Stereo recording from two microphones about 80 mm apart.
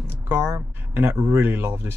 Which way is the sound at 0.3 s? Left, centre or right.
Right.